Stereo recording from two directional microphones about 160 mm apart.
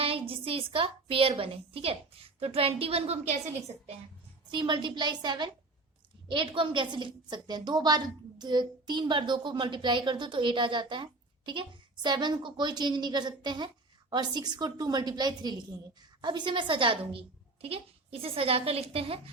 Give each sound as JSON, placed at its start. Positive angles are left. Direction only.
{"t": 0.0, "sound": "a sound", "side_deg": -35}
{"t": 1.4, "sound": "a woman's voice", "side_deg": -35}
{"t": 4.5, "sound": "a woman's voice", "side_deg": -30}